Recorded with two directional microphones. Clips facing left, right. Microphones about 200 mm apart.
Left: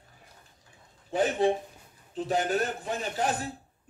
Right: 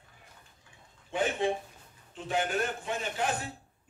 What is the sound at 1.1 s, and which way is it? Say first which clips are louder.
A man's voice: left 4 dB; 40° left (ahead or behind).